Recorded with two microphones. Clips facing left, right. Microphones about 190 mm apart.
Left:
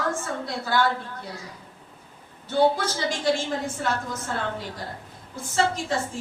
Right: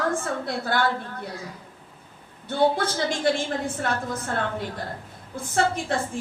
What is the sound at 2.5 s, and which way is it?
Speech, 55° right (ahead or behind).